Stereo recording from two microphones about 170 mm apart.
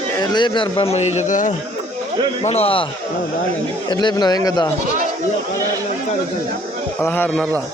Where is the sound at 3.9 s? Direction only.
25° left (ahead or behind).